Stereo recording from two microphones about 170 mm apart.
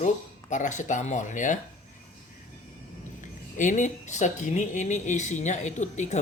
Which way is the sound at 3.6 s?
50° left (ahead or behind).